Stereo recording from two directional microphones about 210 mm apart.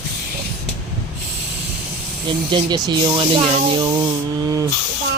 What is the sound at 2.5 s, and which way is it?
Speech, 20° right (ahead or behind).